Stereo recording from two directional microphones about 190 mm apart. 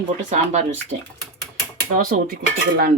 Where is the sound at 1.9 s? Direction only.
50° right (ahead or behind).